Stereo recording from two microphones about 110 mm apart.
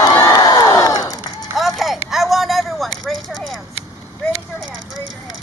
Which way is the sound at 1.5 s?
Centre (ahead or behind).